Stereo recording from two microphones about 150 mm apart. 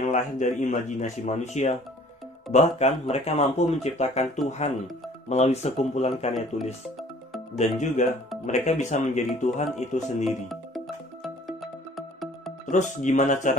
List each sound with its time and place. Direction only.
0.1 s speech: 55° left (ahead or behind)
7.5 s speech: 50° left (ahead or behind)
10.2 s speech: centre (ahead or behind)
12.6 s speech: 55° left (ahead or behind)